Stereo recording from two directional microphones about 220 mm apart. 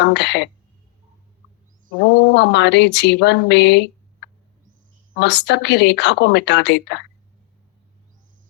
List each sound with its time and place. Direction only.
0.0 s speech: 50° left (ahead or behind)
2.0 s speech: 50° left (ahead or behind)
5.1 s speech: 50° left (ahead or behind)